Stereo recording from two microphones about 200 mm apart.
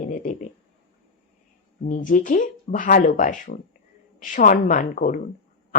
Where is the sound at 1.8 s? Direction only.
40° left (ahead or behind).